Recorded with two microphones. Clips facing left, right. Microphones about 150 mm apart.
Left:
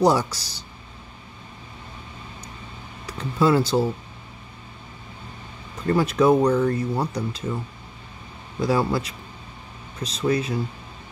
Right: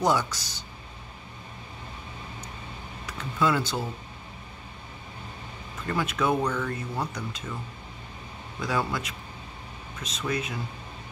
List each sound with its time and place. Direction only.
0.0 s speech: 35° left (ahead or behind)
3.1 s speech: 35° left (ahead or behind)
5.9 s speech: 35° left (ahead or behind)
8.5 s speech: 35° left (ahead or behind)